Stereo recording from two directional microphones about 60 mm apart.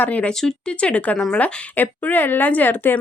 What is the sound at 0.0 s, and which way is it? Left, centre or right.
Speech, left.